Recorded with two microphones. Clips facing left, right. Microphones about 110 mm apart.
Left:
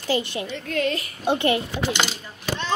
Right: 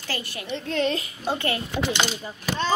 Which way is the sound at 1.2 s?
20° left (ahead or behind).